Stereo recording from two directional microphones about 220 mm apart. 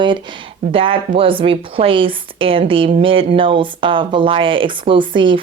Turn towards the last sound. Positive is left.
turn(degrees=-20)  # may be behind; listen again after turning